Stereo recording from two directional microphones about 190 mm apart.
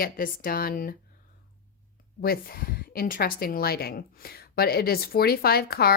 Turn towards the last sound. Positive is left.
turn(degrees=55)  # may be behind; listen again after turning